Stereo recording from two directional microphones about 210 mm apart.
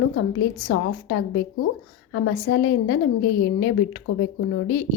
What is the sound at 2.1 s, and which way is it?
A woman's voice, 60° left (ahead or behind).